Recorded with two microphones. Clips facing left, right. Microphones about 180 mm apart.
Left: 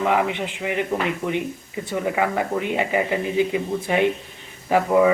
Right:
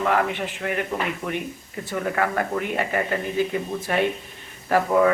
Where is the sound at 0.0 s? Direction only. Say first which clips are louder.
Left 1 dB; 15° left (ahead or behind).